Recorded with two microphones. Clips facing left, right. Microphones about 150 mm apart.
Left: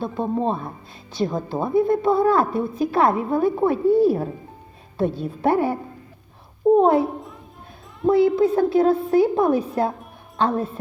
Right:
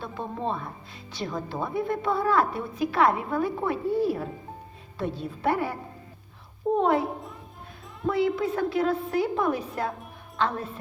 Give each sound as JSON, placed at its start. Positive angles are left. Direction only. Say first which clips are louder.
{"t": 0.0, "sound": "a woman's voice", "louder": "left 9 dB", "side_deg": 40}
{"t": 6.7, "sound": "a woman's voice", "louder": "left 6 dB", "side_deg": 40}
{"t": 8.0, "sound": "a woman's voice", "louder": "left 8 dB", "side_deg": 35}